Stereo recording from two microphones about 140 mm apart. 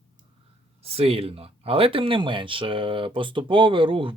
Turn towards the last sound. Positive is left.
turn(degrees=-35)  # may be behind; listen again after turning